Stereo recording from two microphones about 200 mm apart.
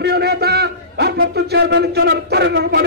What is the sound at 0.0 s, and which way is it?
A man's voice, 55° right (ahead or behind).